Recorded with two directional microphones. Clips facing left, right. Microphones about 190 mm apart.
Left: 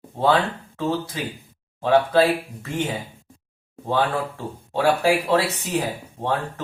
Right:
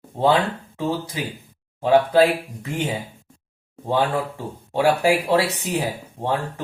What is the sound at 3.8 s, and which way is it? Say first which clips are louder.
Speech: right 1 dB; 15° right (ahead or behind).